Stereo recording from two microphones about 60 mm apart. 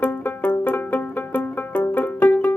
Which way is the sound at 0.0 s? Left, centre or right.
Left.